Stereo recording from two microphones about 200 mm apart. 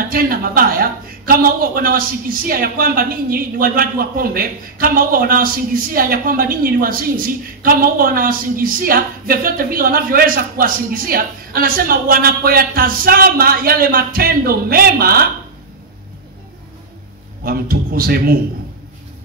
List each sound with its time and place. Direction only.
0.1 s a woman's voice: 45° right (ahead or behind)
17.5 s a woman's voice: 45° right (ahead or behind)